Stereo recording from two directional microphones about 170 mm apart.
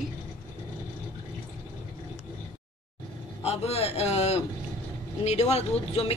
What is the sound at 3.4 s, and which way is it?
A man's voice, 35° left (ahead or behind).